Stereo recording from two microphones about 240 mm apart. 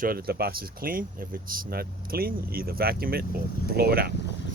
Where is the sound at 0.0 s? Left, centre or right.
Right.